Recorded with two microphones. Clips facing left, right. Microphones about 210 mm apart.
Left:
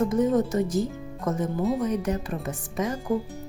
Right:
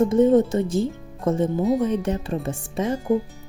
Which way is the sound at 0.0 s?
25° right (ahead or behind).